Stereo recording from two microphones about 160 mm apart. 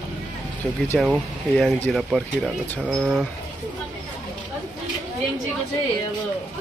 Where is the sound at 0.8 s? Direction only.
5° left (ahead or behind).